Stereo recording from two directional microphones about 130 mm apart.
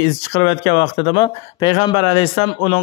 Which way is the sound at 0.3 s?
40° left (ahead or behind).